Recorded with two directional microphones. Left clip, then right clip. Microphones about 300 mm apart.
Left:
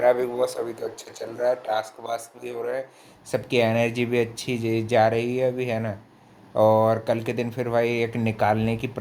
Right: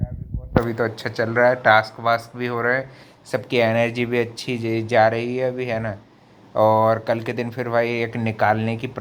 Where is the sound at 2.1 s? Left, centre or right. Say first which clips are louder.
Right 10 dB; centre.